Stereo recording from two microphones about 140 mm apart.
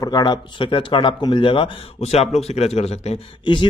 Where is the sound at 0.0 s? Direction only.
30° left (ahead or behind); by 3.2 s 50° left (ahead or behind).